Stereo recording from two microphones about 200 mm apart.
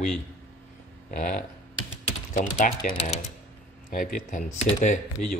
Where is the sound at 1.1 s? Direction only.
40° left (ahead or behind).